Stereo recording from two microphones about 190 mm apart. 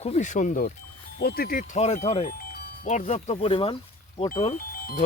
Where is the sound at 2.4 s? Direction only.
55° left (ahead or behind); by 3.8 s 30° left (ahead or behind).